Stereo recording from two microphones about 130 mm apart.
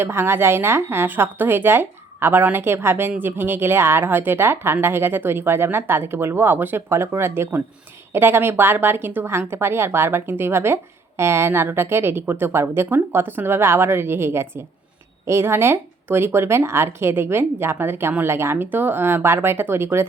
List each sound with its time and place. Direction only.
0.0 s a woman's voice: 20° right (ahead or behind)